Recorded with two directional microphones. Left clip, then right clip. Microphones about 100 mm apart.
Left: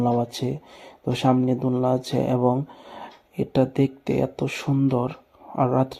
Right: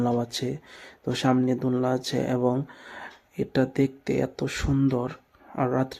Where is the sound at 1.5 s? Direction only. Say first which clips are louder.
Left 2 dB; 30° right (ahead or behind).